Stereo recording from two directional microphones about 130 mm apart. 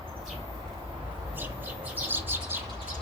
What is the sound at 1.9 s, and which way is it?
Bird, 15° right (ahead or behind).